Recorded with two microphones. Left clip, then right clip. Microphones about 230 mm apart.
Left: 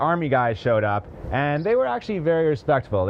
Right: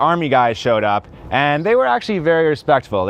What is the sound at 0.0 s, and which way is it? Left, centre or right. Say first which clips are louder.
Speech: right 6 dB; right.